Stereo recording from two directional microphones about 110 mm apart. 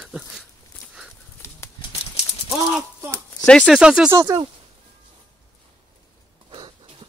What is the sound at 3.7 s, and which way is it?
Speech, 5° right (ahead or behind).